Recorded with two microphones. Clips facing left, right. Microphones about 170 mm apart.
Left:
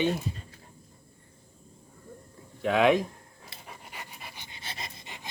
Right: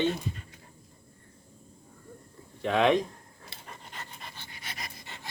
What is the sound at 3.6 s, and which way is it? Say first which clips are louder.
Pant: even; 10° left (ahead or behind).